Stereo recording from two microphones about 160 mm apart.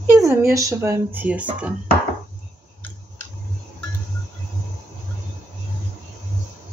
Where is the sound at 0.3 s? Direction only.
20° right (ahead or behind).